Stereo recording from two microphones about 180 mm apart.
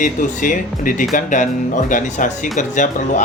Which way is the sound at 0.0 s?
45° left (ahead or behind).